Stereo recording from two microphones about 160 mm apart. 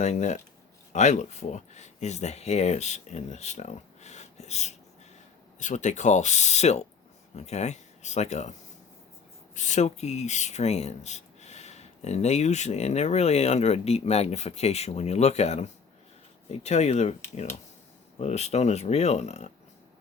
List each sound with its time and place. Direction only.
0.0 s speech: 45° left (ahead or behind)
9.6 s speech: 50° left (ahead or behind)
18.2 s speech: 45° left (ahead or behind)